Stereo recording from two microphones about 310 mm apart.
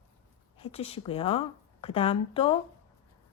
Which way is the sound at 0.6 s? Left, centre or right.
Centre.